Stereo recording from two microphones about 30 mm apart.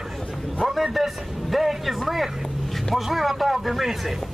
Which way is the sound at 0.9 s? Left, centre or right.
Centre.